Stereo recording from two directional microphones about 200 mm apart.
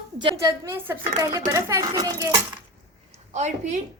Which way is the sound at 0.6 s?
10° right (ahead or behind).